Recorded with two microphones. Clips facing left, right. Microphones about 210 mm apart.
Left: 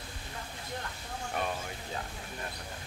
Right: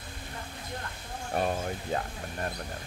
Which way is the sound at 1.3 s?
40° right (ahead or behind).